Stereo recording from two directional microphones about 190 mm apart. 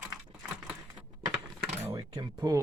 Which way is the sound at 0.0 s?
5° right (ahead or behind).